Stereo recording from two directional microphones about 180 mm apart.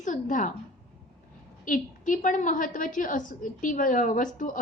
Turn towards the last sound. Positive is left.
turn(degrees=45)  # may be behind; listen again after turning